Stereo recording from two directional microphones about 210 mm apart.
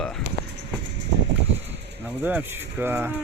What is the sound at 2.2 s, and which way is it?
Speech, 10° right (ahead or behind).